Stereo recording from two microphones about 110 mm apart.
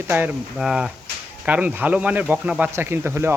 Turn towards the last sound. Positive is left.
turn(degrees=-25)  # may be behind; listen again after turning